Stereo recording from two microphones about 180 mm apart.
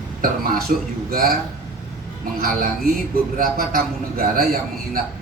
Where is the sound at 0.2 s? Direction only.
50° right (ahead or behind).